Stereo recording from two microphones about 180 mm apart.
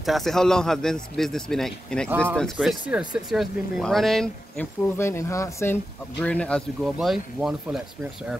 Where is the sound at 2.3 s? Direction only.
Centre (ahead or behind).